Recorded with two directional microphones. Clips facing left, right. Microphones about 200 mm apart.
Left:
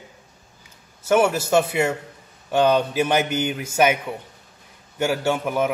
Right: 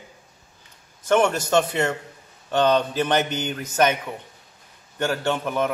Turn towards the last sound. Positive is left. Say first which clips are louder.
# left 2 dB
turn(degrees=10)  # may be behind; listen again after turning